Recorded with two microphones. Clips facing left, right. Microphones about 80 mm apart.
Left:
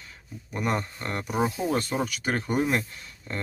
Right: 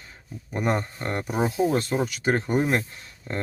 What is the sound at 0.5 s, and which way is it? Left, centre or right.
Speech, right.